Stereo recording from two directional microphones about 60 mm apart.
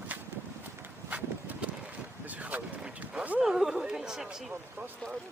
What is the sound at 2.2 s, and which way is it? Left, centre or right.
Vehicle, right.